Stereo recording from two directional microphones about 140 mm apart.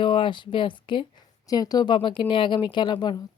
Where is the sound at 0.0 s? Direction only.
35° left (ahead or behind).